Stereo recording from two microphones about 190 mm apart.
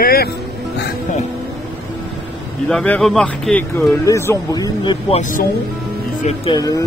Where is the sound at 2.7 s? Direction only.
5° left (ahead or behind).